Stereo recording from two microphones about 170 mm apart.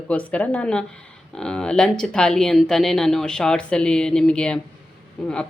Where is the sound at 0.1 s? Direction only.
10° left (ahead or behind).